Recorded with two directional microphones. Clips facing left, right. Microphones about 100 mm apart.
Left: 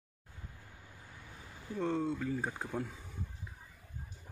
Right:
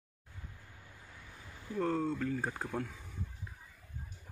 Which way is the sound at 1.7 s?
Centre (ahead or behind).